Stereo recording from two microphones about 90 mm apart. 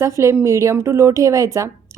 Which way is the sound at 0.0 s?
30° right (ahead or behind).